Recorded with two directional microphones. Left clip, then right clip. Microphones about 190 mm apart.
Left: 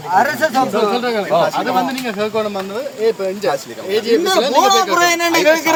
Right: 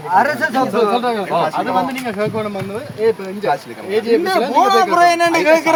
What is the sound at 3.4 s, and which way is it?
Speech, 45° right (ahead or behind).